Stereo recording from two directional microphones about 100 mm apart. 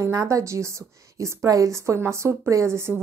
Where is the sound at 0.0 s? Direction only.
30° right (ahead or behind).